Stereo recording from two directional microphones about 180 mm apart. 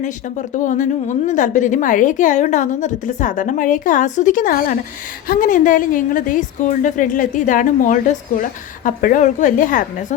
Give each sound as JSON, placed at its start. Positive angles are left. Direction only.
{"t": 0.5, "sound": "a woman's voice", "side_deg": 45}